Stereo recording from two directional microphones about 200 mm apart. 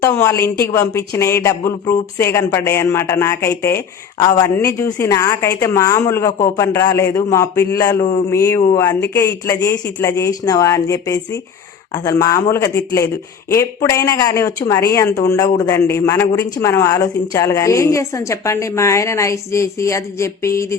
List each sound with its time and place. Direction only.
0.0 s speech: 15° left (ahead or behind)